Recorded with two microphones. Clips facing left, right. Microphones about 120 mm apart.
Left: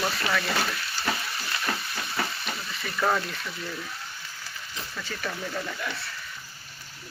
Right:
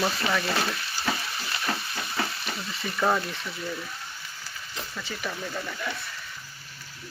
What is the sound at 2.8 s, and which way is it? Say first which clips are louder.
Speech: right 1 dB; 10° right (ahead or behind).